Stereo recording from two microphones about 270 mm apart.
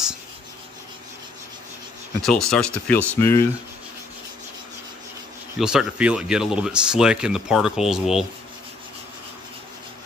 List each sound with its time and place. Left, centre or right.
2.2 s speech: centre
5.6 s speech: centre